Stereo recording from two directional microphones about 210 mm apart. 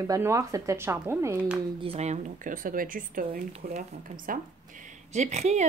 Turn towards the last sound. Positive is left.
turn(degrees=-35)  # may be behind; listen again after turning